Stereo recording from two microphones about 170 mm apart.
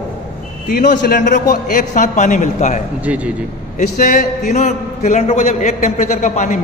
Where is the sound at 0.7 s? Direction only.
55° left (ahead or behind).